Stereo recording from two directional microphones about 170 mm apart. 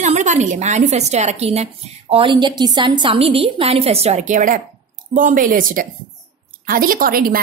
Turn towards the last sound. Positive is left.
turn(degrees=-60)  # may be behind; listen again after turning